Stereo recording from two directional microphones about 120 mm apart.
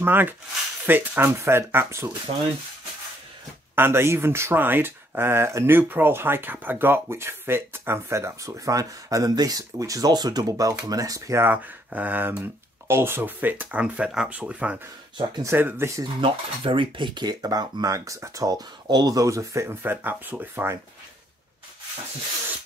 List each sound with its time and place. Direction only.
0.0 s speech: 15° right (ahead or behind)
3.7 s speech: 20° right (ahead or behind)
11.5 s speech: 15° right (ahead or behind)
16.0 s speech: 45° right (ahead or behind); by 20.8 s 20° right (ahead or behind)